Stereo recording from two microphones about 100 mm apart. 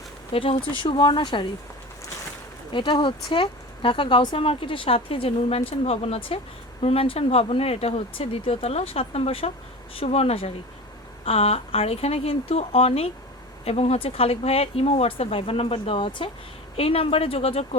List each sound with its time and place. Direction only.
0.3 s speech: 60° left (ahead or behind)
2.7 s a woman's voice: 55° left (ahead or behind)
16.7 s speech: 75° left (ahead or behind)